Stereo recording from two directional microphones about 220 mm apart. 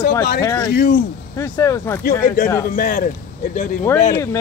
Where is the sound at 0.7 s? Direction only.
45° left (ahead or behind).